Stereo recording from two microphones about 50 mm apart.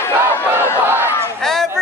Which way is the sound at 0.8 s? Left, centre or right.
Right.